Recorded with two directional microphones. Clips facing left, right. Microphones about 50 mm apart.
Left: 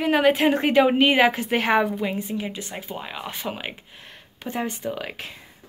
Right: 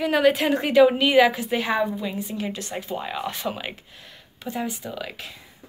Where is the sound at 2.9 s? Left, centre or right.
Centre.